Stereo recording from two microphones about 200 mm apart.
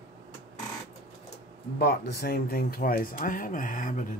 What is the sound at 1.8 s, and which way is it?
Speech, 50° left (ahead or behind).